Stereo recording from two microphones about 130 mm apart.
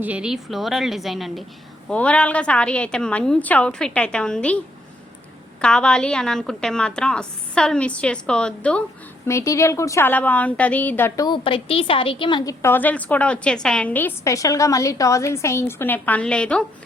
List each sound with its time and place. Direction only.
0.0 s a woman's voice: 10° right (ahead or behind); by 4.6 s 10° left (ahead or behind)
5.6 s a woman's voice: 5° left (ahead or behind)
9.2 s a woman's voice: 25° left (ahead or behind)
11.4 s a woman's voice: 45° left (ahead or behind)
12.5 s a woman's voice: 15° left (ahead or behind)
14.3 s a woman's voice: 25° left (ahead or behind); by 16.6 s 10° left (ahead or behind)